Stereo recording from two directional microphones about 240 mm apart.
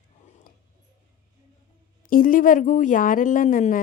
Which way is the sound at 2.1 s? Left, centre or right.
Left.